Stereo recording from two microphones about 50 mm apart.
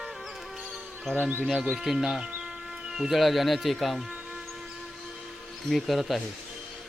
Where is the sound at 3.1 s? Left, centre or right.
Centre.